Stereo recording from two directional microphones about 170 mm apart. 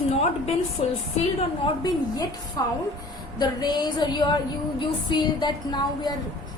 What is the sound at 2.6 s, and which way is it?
A woman's voice, 20° left (ahead or behind).